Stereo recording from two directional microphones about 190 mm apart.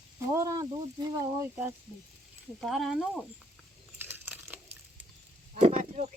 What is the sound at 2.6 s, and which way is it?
Speech, centre (ahead or behind).